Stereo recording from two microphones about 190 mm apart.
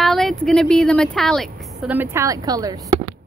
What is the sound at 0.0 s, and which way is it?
A woman's voice, centre (ahead or behind).